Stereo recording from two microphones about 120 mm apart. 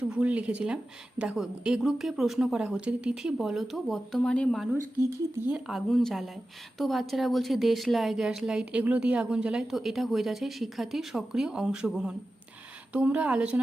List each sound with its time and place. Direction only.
0.0 s speech: 10° right (ahead or behind); by 4.6 s 5° left (ahead or behind)
4.7 s speech: 20° right (ahead or behind)
5.5 s speech: centre (ahead or behind)